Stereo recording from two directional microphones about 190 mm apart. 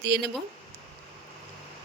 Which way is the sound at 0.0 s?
65° right (ahead or behind).